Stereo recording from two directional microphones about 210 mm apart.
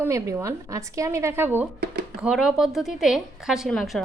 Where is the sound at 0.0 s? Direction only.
15° right (ahead or behind).